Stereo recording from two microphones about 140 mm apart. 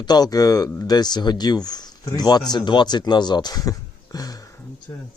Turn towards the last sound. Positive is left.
turn(degrees=25)  # may be behind; listen again after turning